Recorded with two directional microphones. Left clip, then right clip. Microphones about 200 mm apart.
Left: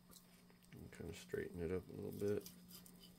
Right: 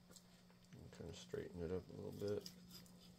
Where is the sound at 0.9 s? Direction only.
40° left (ahead or behind).